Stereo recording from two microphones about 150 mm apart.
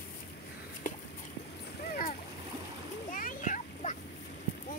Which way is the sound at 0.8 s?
60° left (ahead or behind).